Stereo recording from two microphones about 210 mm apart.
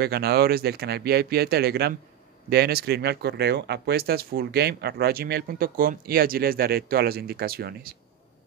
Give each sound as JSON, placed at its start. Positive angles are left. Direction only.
{"t": 0.0, "sound": "speech", "side_deg": -50}